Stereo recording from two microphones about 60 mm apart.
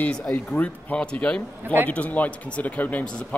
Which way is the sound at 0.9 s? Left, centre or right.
Centre.